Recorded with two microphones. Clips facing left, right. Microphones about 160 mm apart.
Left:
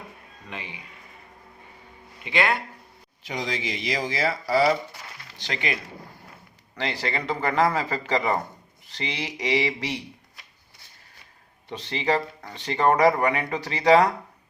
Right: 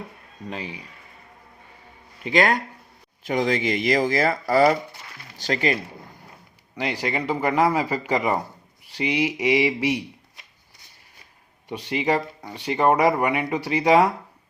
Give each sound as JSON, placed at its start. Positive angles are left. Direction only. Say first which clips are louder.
{"t": 0.4, "sound": "speech", "louder": "right 6 dB", "side_deg": -35}
{"t": 2.2, "sound": "speech", "louder": "right 4 dB", "side_deg": -40}
{"t": 3.2, "sound": "speech", "louder": "right 8 dB", "side_deg": -55}
{"t": 6.7, "sound": "speech", "louder": "right 3 dB", "side_deg": -10}
{"t": 11.7, "sound": "speech", "louder": "right 2 dB", "side_deg": -10}